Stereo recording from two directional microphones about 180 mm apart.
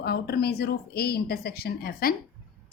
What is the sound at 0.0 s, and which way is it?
A woman's voice, 60° left (ahead or behind).